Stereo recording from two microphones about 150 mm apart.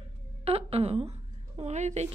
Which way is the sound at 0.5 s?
40° right (ahead or behind).